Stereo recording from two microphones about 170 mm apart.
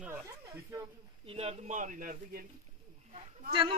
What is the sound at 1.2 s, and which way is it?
Speech, 35° right (ahead or behind).